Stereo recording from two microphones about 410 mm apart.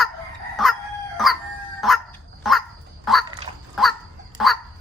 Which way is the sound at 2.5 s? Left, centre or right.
Centre.